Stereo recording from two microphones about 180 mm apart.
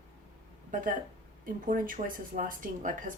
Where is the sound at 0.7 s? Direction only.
45° right (ahead or behind).